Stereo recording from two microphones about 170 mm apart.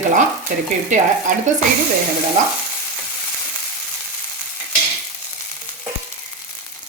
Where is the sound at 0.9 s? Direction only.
45° right (ahead or behind).